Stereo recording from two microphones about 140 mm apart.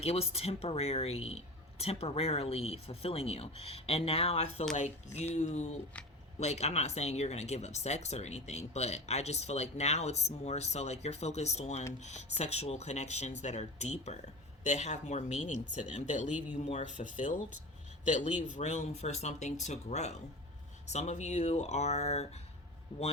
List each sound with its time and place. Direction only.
0.0 s speech: 45° left (ahead or behind)
22.9 s speech: 40° left (ahead or behind)